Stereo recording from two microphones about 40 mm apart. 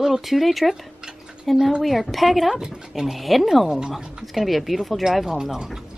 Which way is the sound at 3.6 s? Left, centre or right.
Centre.